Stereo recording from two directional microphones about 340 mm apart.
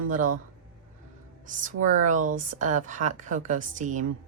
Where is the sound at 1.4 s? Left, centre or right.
Right.